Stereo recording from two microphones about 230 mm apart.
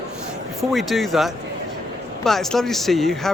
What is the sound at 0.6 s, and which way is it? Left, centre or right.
Speech, centre.